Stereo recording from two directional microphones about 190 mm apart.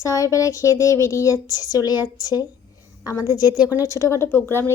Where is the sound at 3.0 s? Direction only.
15° left (ahead or behind).